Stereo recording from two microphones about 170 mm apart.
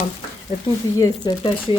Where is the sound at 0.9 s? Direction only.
20° left (ahead or behind).